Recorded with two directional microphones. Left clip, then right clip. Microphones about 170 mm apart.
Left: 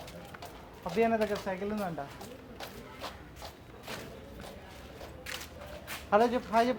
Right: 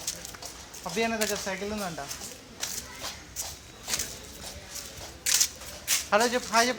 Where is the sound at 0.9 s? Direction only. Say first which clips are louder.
Even; 35° right (ahead or behind).